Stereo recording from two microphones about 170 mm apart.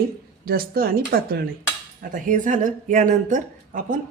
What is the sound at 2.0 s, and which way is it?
A woman's voice, 50° right (ahead or behind).